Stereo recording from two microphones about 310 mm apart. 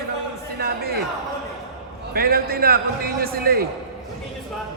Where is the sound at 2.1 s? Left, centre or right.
Right.